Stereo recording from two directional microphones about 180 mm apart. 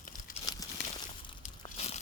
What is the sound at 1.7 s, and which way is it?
Crumpling, 35° left (ahead or behind).